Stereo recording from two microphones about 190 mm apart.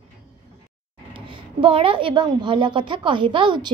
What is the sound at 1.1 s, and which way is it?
A woman's voice, 30° right (ahead or behind).